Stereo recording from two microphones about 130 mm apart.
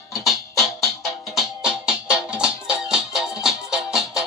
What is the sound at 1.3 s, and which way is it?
Music, 5° right (ahead or behind).